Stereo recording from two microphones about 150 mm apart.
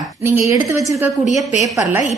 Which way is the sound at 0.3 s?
20° right (ahead or behind).